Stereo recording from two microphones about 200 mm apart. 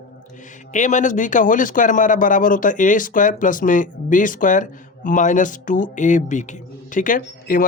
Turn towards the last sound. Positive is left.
turn(degrees=45)  # may be behind; listen again after turning